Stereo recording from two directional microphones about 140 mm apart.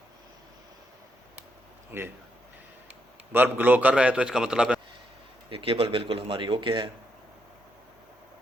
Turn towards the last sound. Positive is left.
turn(degrees=-35)  # may be behind; listen again after turning